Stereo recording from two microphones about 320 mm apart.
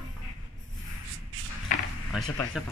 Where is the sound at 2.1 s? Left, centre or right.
Centre.